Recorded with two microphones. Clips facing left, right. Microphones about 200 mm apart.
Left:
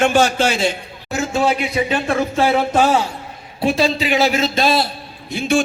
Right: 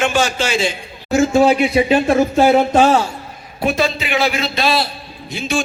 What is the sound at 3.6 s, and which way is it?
A man's voice, 30° left (ahead or behind).